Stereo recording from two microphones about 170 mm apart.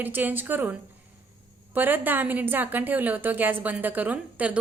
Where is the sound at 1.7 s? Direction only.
10° right (ahead or behind).